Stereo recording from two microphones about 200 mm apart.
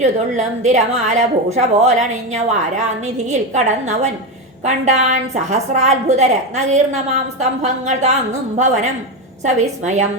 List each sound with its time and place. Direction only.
0.0 s a woman's voice: 35° right (ahead or behind)
3.5 s a woman's voice: 35° right (ahead or behind)